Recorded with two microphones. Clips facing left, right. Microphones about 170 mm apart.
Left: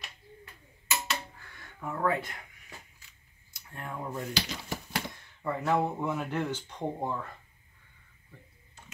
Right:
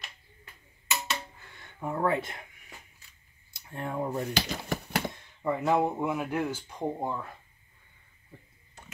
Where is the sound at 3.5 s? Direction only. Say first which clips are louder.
Right 6 dB; 25° right (ahead or behind).